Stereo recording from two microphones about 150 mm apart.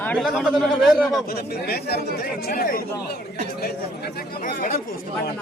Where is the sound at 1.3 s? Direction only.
90° left; by 2.8 s 75° left (ahead or behind).